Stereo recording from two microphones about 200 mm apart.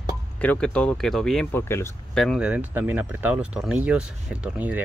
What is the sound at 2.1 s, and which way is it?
Speech, centre (ahead or behind).